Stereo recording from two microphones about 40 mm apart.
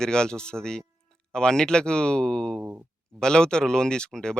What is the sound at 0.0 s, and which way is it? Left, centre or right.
Speech, centre.